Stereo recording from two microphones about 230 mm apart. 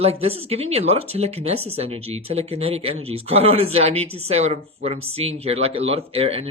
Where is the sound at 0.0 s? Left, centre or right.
Right.